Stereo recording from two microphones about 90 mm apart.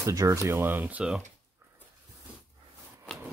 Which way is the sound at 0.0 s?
40° right (ahead or behind).